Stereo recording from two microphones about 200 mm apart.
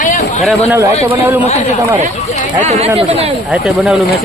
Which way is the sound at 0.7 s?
15° right (ahead or behind).